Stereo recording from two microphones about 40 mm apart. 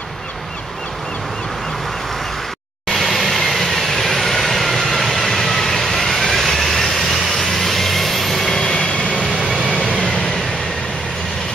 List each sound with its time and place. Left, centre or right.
2.9 s vehicle: centre
8.6 s vehicle: left